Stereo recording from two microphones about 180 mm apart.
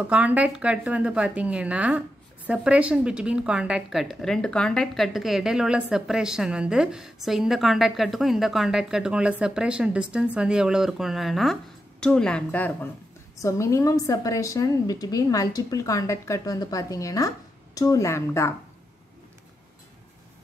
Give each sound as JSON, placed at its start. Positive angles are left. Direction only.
{"t": 0.1, "sound": "a woman's voice", "side_deg": -10}